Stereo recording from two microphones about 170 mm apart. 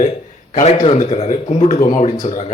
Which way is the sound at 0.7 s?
30° left (ahead or behind).